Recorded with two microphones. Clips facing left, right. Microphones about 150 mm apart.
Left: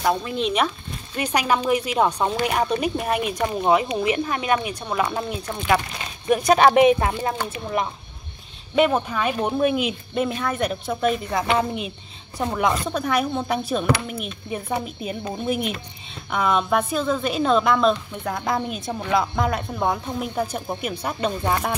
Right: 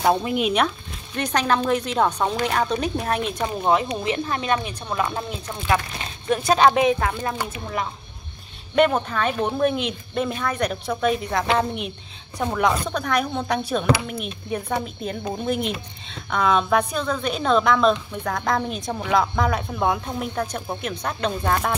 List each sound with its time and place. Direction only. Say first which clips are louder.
0.0 s speech: right 3 dB; 20° right (ahead or behind)
0.4 s a woman's voice: right 1 dB; centre (ahead or behind)
1.1 s speech: even; 10° left (ahead or behind)
8.7 s a woman's voice: even; 5° left (ahead or behind)